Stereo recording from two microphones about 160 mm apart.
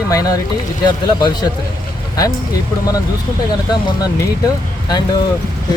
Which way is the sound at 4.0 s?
25° left (ahead or behind).